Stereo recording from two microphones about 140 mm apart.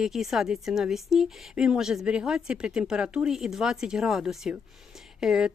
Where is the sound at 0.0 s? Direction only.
Centre (ahead or behind).